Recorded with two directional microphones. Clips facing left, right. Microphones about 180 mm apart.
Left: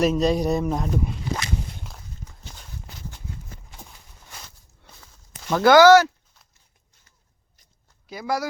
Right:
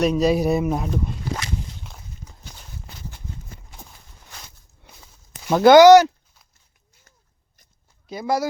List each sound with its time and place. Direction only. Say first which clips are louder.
0.0 s speech: right 2 dB; centre (ahead or behind)
0.9 s speech: even; 5° left (ahead or behind)
4.9 s walk: right 1 dB; 10° right (ahead or behind)
5.5 s speech: right 4 dB; 20° right (ahead or behind)
8.0 s speech: right 4 dB; 25° right (ahead or behind)